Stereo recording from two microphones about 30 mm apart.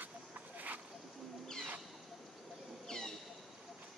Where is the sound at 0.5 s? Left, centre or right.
Right.